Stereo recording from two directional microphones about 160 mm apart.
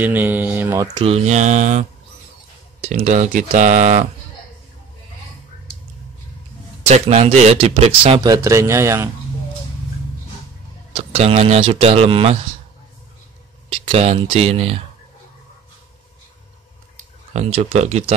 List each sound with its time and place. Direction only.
0.0 s mantra: 10° right (ahead or behind)
1.0 s speech: 40° right (ahead or behind)
6.9 s speech: 40° right (ahead or behind)
8.2 s mantra: 20° right (ahead or behind)
11.0 s speech: 40° right (ahead or behind)
13.7 s speech: 35° right (ahead or behind)
17.3 s speech: 40° right (ahead or behind)